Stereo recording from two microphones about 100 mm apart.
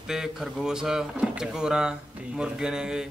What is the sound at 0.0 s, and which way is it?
A man's voice, 5° right (ahead or behind).